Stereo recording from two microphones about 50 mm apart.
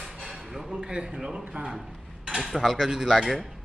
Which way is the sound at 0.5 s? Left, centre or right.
Centre.